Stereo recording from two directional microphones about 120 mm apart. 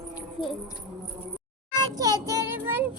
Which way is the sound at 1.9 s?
30° right (ahead or behind).